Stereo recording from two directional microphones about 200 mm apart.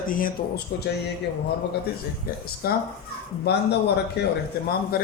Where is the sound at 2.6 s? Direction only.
50° left (ahead or behind).